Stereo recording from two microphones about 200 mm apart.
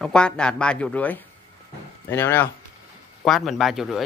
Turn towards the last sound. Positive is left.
turn(degrees=0)  # may be behind; listen again after turning